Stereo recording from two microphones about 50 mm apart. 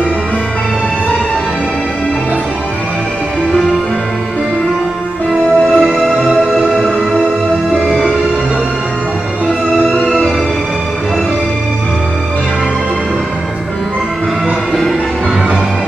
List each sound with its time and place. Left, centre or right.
5.8 s music: centre